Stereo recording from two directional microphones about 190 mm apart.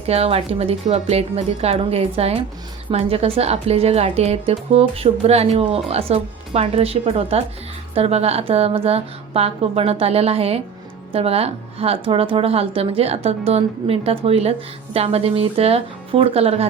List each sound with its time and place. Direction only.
0.1 s speech: 30° right (ahead or behind)